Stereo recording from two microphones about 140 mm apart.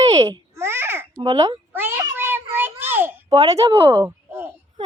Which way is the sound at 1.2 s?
25° right (ahead or behind).